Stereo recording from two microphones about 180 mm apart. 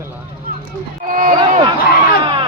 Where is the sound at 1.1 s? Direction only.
50° right (ahead or behind).